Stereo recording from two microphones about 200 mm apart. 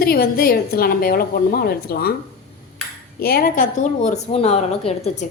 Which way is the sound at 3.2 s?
50° left (ahead or behind).